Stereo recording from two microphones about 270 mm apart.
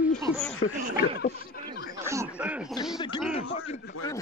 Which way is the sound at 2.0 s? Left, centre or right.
Centre.